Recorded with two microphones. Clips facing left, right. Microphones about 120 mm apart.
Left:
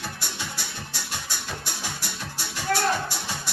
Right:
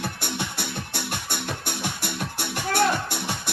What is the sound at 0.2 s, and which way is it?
Music, 55° right (ahead or behind).